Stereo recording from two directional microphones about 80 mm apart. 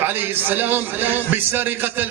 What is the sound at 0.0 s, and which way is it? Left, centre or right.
A man's voice, right.